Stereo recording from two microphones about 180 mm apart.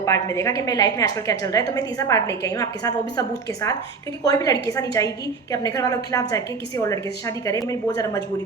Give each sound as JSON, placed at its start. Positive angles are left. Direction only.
{"t": 0.0, "sound": "a woman's voice", "side_deg": 15}